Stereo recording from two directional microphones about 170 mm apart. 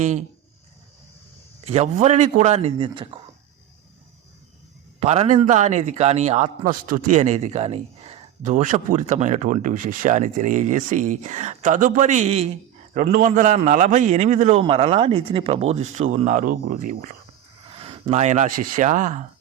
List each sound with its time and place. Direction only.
0.0 s a man's voice: 45° right (ahead or behind)
1.6 s speech: 40° right (ahead or behind)
4.9 s a man's voice: 40° right (ahead or behind)
12.9 s a man's voice: 50° right (ahead or behind)
14.6 s speech: 30° right (ahead or behind); by 17.2 s 50° right (ahead or behind)
17.7 s speech: 30° right (ahead or behind)